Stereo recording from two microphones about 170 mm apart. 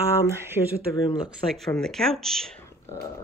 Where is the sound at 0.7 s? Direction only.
20° left (ahead or behind).